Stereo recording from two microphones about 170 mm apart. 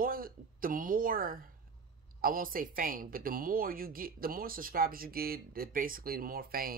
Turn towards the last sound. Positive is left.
turn(degrees=-60)  # may be behind; listen again after turning